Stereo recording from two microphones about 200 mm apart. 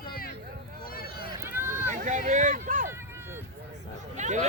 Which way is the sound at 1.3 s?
10° right (ahead or behind).